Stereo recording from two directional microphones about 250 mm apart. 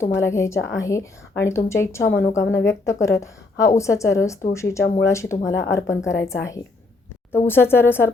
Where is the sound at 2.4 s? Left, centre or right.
Left.